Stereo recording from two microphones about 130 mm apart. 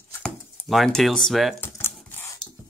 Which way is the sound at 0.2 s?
Centre (ahead or behind).